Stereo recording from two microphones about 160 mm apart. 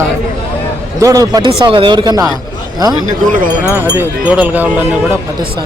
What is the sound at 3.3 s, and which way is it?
Speech, 60° right (ahead or behind).